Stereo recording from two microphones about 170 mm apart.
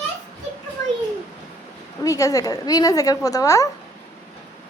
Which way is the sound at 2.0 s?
20° left (ahead or behind).